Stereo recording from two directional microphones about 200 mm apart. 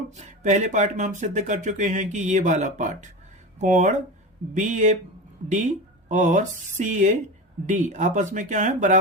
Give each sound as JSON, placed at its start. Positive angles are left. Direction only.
{"t": 0.2, "sound": "speech", "side_deg": -35}